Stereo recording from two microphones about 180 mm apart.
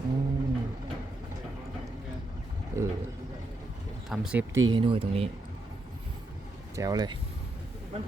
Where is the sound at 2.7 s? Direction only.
15° right (ahead or behind).